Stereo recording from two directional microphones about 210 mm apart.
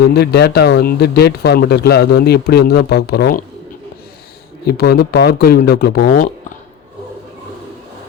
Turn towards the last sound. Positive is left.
turn(degrees=45)  # may be behind; listen again after turning